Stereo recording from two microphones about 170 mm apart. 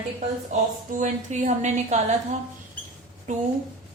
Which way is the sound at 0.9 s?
45° right (ahead or behind).